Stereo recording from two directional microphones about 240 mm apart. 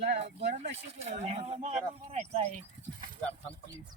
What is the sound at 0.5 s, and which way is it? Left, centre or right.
Speech, right.